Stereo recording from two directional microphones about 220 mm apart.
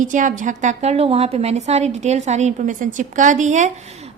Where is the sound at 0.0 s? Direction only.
35° right (ahead or behind).